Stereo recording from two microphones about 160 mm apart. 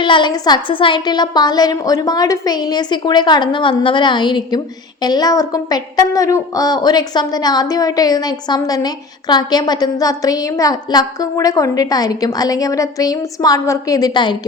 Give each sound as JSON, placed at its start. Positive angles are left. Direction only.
{"t": 0.0, "sound": "a woman's voice", "side_deg": 30}